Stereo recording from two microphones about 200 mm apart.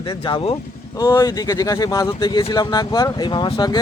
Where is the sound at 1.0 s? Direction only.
15° left (ahead or behind).